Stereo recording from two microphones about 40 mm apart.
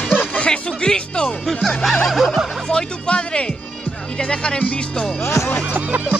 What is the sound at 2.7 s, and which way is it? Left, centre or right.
Speech, left.